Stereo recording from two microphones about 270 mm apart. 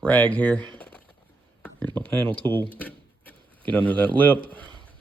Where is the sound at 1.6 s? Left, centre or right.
Centre.